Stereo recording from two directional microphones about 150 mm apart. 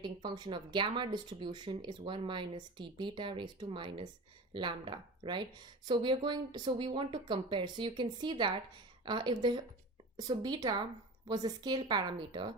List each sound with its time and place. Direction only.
0.0 s a woman's voice: 30° right (ahead or behind)